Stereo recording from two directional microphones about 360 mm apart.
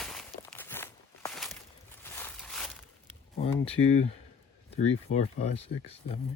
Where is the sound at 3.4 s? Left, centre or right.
Centre.